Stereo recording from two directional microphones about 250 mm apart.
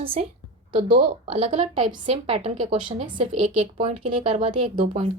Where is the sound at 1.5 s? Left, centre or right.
Right.